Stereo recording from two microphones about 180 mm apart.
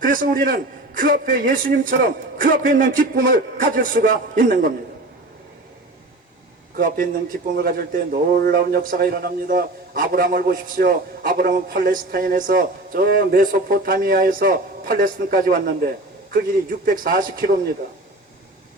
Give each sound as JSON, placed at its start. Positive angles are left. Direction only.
{"t": 0.0, "sound": "speech", "side_deg": -50}
{"t": 6.7, "sound": "speech", "side_deg": -50}